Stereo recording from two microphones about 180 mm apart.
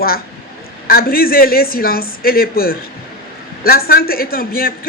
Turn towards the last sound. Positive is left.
turn(degrees=55)  # may be behind; listen again after turning